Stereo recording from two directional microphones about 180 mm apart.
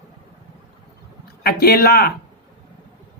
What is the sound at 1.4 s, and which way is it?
Speech, 55° left (ahead or behind).